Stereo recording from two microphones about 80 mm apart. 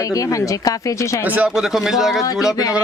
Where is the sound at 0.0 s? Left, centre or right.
Left.